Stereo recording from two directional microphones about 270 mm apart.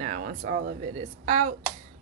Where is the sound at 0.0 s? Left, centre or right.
Right.